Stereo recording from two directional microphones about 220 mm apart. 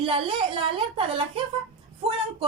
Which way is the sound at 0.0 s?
25° right (ahead or behind).